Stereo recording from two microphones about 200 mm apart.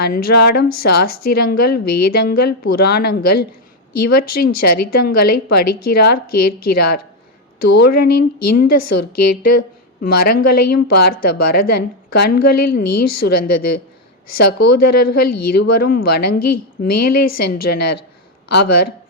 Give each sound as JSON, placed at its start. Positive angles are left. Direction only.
{"t": 0.0, "sound": "speech", "side_deg": 50}